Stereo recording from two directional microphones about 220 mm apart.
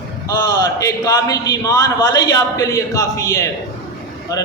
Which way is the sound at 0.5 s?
15° left (ahead or behind).